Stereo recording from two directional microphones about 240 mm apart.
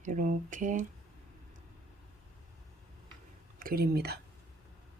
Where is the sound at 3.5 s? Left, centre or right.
Right.